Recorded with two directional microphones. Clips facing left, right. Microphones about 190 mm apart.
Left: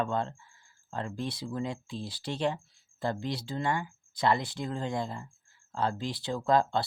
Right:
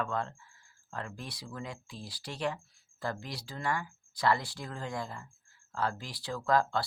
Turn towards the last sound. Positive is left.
turn(degrees=25)  # may be behind; listen again after turning